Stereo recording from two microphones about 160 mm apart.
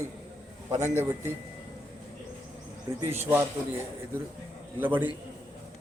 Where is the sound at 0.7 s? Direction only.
45° right (ahead or behind).